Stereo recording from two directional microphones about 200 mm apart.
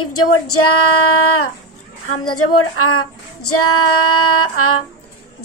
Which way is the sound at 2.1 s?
90° left.